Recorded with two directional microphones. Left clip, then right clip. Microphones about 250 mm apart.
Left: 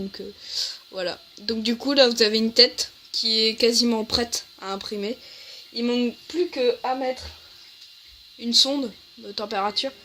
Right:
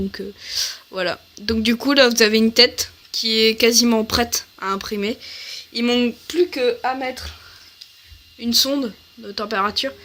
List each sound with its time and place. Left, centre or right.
0.1 s speech: right
8.4 s speech: right